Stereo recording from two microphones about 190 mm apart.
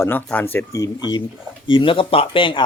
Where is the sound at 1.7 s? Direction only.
25° left (ahead or behind).